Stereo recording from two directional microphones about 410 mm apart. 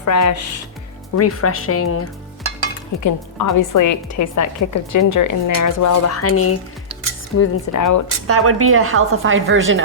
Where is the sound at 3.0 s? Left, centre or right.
Left.